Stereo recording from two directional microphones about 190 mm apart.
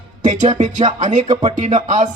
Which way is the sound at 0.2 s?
40° right (ahead or behind).